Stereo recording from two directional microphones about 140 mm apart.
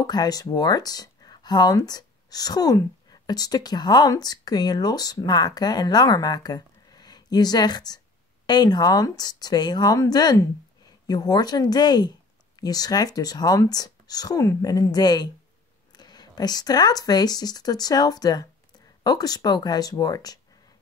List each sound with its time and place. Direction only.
0.0 s speech: 30° left (ahead or behind)